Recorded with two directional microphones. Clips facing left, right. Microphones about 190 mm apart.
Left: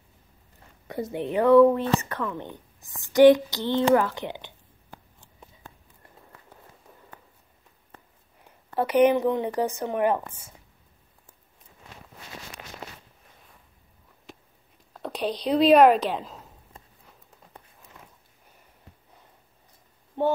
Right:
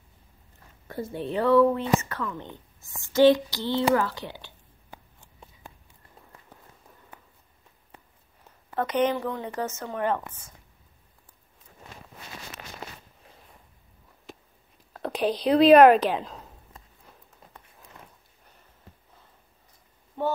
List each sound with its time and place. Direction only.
0.9 s a woman's voice: 20° left (ahead or behind)
8.7 s a woman's voice: 10° left (ahead or behind)
15.0 s speech: centre (ahead or behind)